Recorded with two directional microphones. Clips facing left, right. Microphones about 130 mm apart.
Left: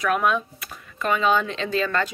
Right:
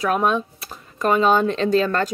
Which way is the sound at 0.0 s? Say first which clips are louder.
Right 2 dB; 30° right (ahead or behind).